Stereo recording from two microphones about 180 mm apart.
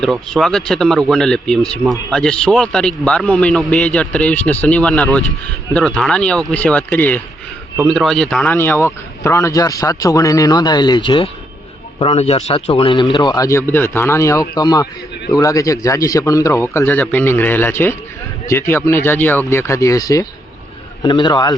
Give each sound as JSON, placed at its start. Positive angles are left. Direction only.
{"t": 0.0, "sound": "a man's voice", "side_deg": 0}